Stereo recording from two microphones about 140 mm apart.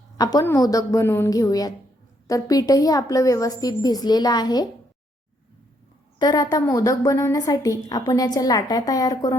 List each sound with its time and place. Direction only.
0.2 s a woman's voice: 25° left (ahead or behind)
6.1 s a woman's voice: 30° left (ahead or behind)